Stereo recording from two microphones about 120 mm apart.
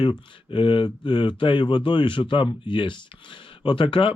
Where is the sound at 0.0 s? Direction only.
45° left (ahead or behind).